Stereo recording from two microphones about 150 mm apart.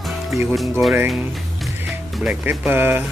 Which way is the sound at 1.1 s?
Centre (ahead or behind).